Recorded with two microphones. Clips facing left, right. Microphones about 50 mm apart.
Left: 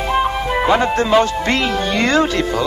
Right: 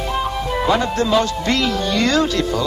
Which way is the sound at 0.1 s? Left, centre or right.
Left.